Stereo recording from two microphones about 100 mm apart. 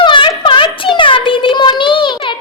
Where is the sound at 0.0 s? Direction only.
55° left (ahead or behind).